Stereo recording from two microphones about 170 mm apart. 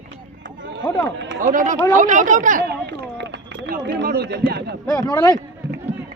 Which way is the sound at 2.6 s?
75° right (ahead or behind).